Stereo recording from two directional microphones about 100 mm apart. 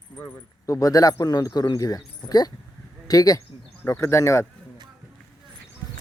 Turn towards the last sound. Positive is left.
turn(degrees=30)  # may be behind; listen again after turning